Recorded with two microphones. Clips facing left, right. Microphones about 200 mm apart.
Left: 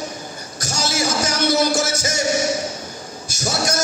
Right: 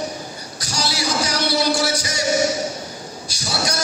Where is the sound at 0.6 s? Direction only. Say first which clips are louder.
Left 2 dB; 45° left (ahead or behind).